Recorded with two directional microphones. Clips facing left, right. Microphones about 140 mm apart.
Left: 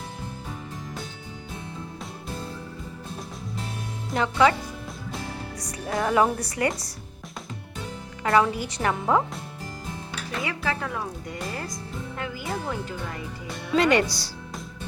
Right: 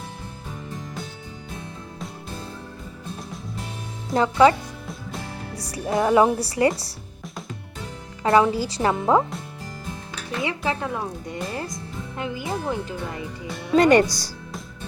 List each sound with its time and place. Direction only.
4.1 s speech: 35° right (ahead or behind)
5.5 s speech: 30° right (ahead or behind)
8.2 s speech: 25° right (ahead or behind)
10.4 s speech: 25° right (ahead or behind)
13.7 s speech: 45° right (ahead or behind)